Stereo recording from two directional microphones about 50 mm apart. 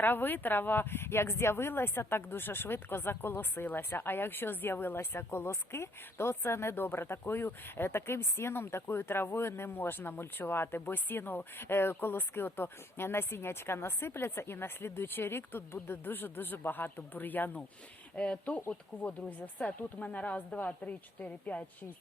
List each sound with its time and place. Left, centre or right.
0.0 s speech: left
18.1 s speech: left